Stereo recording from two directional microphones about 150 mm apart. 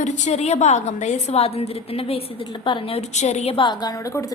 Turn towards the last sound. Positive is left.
turn(degrees=25)  # may be behind; listen again after turning